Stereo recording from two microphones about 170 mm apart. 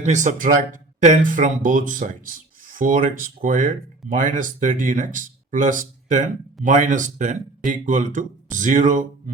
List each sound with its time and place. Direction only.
0.0 s speech: 45° right (ahead or behind)